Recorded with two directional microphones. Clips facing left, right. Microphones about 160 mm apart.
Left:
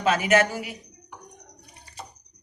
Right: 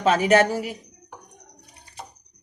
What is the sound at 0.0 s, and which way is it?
Speech, 35° right (ahead or behind).